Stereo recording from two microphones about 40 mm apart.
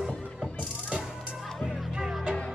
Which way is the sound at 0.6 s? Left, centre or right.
Right.